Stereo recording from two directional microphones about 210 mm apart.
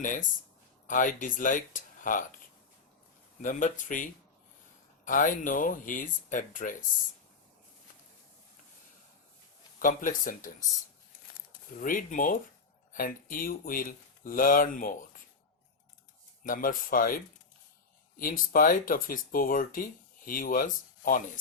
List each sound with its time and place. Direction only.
0.0 s speech: 40° left (ahead or behind)
3.4 s speech: 40° left (ahead or behind)
9.7 s speech: 40° left (ahead or behind)
11.8 s speech: 40° left (ahead or behind)
16.4 s speech: 40° left (ahead or behind)
18.2 s speech: 40° left (ahead or behind)